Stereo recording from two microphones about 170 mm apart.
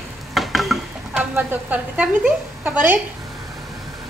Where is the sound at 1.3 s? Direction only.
10° right (ahead or behind).